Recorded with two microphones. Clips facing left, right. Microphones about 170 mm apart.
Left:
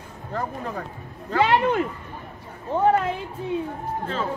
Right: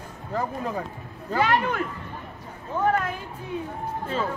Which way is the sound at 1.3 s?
25° left (ahead or behind).